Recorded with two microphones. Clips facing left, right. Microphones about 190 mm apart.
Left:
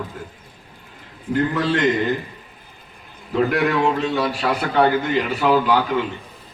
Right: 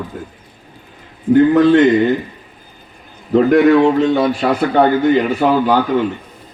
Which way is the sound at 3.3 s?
45° right (ahead or behind).